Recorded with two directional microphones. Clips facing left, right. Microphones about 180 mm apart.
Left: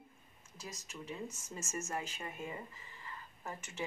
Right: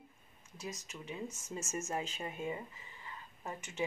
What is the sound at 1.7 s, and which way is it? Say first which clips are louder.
Speech: right 2 dB; 25° right (ahead or behind).